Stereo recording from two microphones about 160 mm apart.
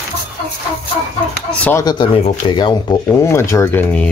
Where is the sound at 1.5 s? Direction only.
10° left (ahead or behind).